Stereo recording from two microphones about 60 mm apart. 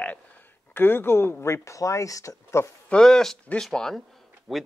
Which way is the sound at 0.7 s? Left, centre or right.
Left.